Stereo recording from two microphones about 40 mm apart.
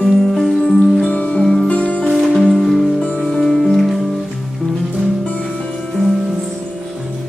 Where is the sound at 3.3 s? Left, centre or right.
Centre.